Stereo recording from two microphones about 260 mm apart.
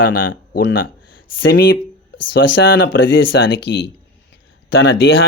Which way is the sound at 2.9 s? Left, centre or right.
Left.